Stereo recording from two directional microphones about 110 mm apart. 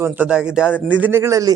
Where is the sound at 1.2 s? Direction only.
30° right (ahead or behind).